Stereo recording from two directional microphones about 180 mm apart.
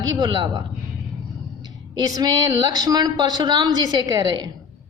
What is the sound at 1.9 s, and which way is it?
Speech, 20° right (ahead or behind).